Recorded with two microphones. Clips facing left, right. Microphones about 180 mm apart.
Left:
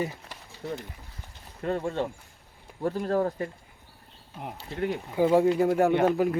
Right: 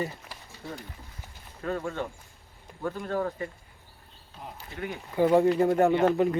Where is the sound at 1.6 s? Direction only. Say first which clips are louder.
Left 3 dB; 30° left (ahead or behind).